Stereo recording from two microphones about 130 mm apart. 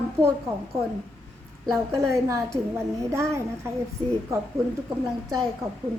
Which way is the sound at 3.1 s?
20° right (ahead or behind).